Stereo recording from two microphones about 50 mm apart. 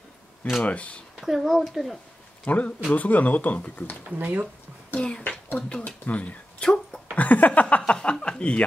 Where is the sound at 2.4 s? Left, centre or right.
Left.